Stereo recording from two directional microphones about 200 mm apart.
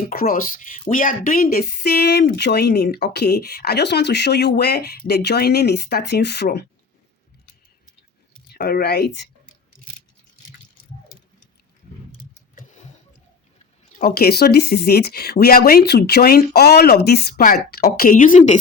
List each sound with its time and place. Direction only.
0.1 s a woman's voice: 45° left (ahead or behind)
8.5 s a woman's voice: 50° left (ahead or behind)
12.5 s a sound: 35° left (ahead or behind)
14.0 s a woman's voice: 50° left (ahead or behind)